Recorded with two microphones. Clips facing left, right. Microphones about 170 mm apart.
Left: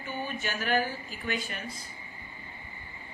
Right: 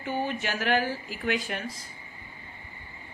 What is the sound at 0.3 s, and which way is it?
Speech, 75° right (ahead or behind).